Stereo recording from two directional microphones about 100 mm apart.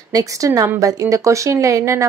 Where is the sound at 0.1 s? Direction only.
35° right (ahead or behind).